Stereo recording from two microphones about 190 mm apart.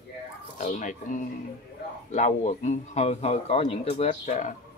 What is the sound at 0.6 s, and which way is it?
A man's voice, 40° left (ahead or behind).